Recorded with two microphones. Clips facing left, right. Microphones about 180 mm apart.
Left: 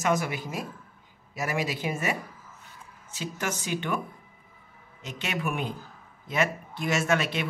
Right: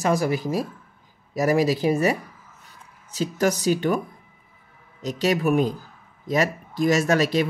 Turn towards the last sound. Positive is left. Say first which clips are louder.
# right 6 dB
turn(degrees=-40)  # may be behind; listen again after turning